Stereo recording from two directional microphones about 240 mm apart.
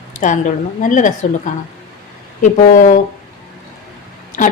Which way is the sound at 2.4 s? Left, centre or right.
Left.